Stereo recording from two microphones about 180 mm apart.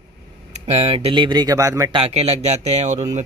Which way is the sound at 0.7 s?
35° right (ahead or behind).